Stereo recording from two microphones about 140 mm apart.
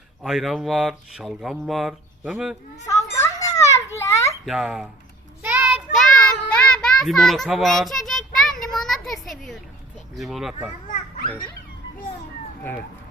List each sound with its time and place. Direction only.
0.2 s speech: centre (ahead or behind)
2.8 s children playing: 20° left (ahead or behind)
4.4 s speech: 5° right (ahead or behind)
5.4 s child singing: 15° right (ahead or behind); by 8.5 s centre (ahead or behind)
8.7 s children playing: centre (ahead or behind)
10.2 s speech: centre (ahead or behind)
10.8 s children playing: 75° left (ahead or behind)